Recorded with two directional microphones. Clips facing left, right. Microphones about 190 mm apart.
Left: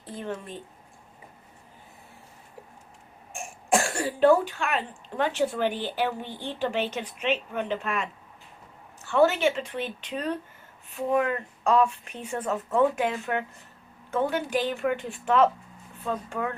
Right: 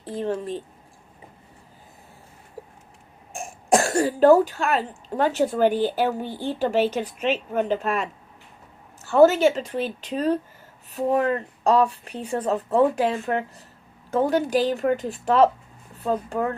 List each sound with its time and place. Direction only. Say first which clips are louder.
0.1 s speech: right 8 dB; 30° right (ahead or behind)
2.6 s a sound: right 7 dB; 35° right (ahead or behind)
3.3 s speech: right 5 dB; 40° right (ahead or behind)